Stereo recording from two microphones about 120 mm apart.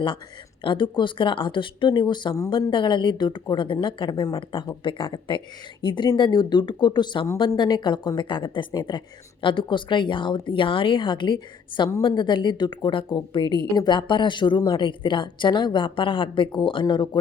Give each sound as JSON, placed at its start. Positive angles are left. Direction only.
{"t": 0.6, "sound": "a woman's voice", "side_deg": 45}